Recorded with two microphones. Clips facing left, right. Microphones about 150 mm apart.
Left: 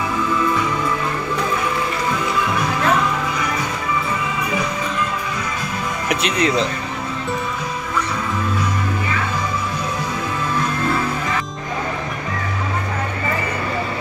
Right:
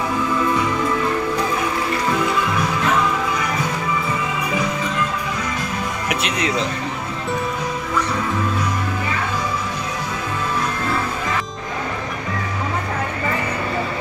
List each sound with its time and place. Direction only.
6.0 s speech: centre (ahead or behind)